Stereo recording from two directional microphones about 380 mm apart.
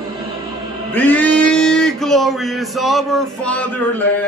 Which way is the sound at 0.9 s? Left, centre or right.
Centre.